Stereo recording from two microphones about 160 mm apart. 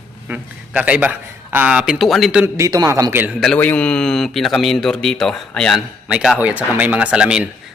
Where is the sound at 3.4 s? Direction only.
10° left (ahead or behind).